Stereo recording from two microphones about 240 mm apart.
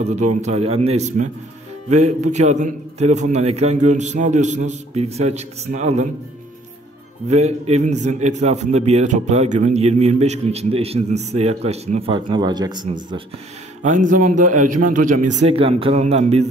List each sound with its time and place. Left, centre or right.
0.0 s a man's voice: right
7.2 s a man's voice: right
13.8 s a man's voice: right
15.4 s a man's voice: right